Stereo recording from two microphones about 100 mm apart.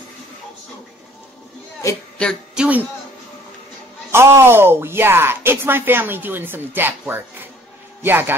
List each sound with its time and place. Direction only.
2.5 s speech: 10° right (ahead or behind)
4.1 s speech: 25° right (ahead or behind)